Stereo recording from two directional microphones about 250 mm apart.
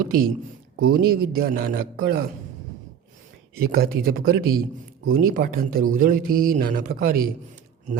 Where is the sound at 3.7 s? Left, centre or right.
Right.